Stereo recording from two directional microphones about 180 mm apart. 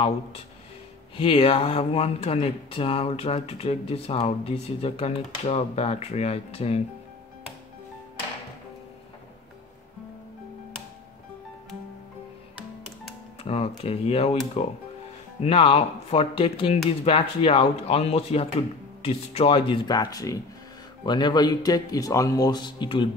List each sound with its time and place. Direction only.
1.1 s speech: 30° left (ahead or behind)
13.4 s speech: 35° left (ahead or behind)